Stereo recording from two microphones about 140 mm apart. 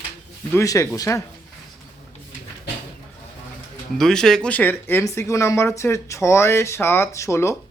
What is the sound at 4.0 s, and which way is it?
Speech, 5° left (ahead or behind).